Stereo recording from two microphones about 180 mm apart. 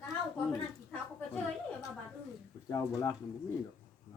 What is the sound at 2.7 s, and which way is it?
Speech, 20° left (ahead or behind).